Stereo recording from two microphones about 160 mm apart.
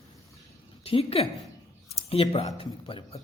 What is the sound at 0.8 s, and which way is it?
A woman's voice, 35° left (ahead or behind).